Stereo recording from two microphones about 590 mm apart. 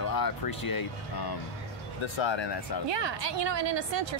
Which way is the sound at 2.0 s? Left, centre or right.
Left.